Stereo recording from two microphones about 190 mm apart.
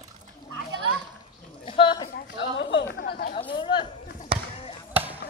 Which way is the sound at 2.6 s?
70° left (ahead or behind).